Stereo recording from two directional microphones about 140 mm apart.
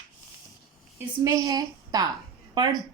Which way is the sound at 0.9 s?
20° right (ahead or behind).